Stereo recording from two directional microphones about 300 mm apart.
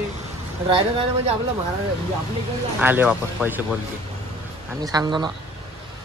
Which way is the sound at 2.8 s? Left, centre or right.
Centre.